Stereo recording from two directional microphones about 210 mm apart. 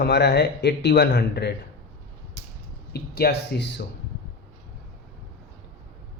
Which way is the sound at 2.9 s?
50° left (ahead or behind).